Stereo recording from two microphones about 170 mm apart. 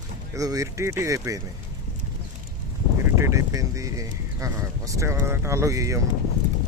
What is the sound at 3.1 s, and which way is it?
Speech, 15° right (ahead or behind).